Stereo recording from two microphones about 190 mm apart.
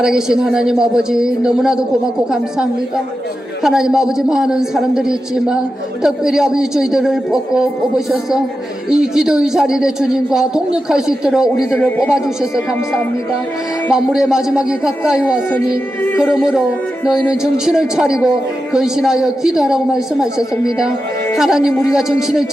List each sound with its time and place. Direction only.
0.0 s speech: 5° right (ahead or behind)
3.6 s speech: 5° right (ahead or behind)
11.7 s music: 10° left (ahead or behind)
11.9 s speech: 5° right (ahead or behind)
13.9 s speech: 5° right (ahead or behind)
15.5 s music: 15° left (ahead or behind)
16.3 s speech: 5° right (ahead or behind)
21.3 s speech: centre (ahead or behind)